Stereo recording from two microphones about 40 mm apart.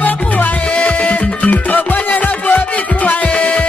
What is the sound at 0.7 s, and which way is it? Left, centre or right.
Music, left.